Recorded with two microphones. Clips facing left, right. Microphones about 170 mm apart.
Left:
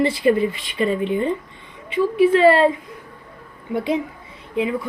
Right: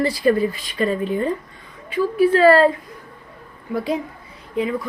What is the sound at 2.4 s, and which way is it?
A woman's voice, 25° left (ahead or behind).